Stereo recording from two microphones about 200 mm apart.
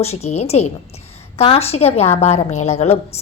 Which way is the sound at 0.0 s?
30° left (ahead or behind).